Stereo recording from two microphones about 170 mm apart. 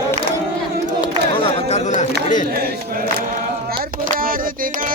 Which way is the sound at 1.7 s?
45° left (ahead or behind).